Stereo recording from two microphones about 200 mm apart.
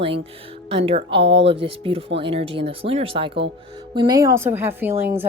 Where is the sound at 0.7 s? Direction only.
30° right (ahead or behind).